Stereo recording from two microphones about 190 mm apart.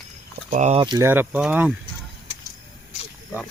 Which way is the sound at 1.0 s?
10° right (ahead or behind).